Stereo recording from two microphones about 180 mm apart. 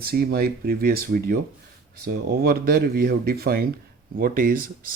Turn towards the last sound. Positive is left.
turn(degrees=-50)  # may be behind; listen again after turning